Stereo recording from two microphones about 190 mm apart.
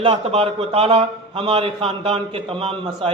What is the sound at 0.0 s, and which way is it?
A man's voice, 30° right (ahead or behind).